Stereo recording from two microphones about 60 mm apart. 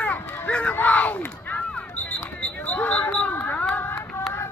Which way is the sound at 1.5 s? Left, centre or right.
Left.